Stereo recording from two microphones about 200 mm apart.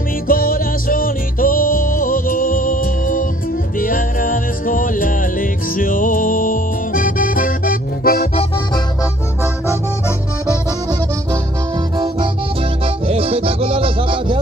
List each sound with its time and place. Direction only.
0.3 s music: 45° left (ahead or behind)
9.4 s music: 15° left (ahead or behind)
12.8 s music: 30° right (ahead or behind)